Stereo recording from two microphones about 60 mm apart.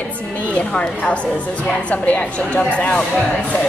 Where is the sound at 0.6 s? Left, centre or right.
Centre.